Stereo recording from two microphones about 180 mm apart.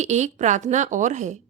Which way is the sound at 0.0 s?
40° right (ahead or behind).